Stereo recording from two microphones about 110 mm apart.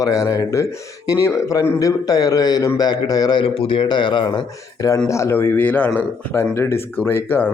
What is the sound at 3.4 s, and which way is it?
A man's voice, 55° left (ahead or behind).